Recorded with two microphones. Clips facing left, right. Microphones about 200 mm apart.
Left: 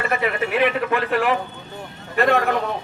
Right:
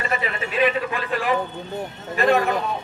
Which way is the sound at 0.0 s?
60° left (ahead or behind).